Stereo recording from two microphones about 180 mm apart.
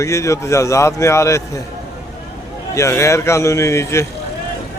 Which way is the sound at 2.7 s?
15° left (ahead or behind).